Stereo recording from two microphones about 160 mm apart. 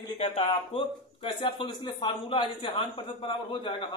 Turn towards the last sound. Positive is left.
turn(degrees=30)  # may be behind; listen again after turning